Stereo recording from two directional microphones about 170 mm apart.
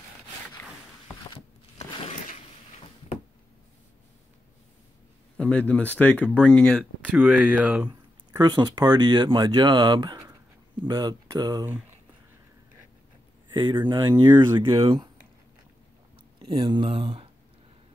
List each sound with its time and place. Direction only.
5.4 s speech: 5° left (ahead or behind)
7.2 s speech: 10° right (ahead or behind)
7.9 s speech: 25° right (ahead or behind)
13.5 s speech: 25° right (ahead or behind)
16.3 s speech: 25° right (ahead or behind)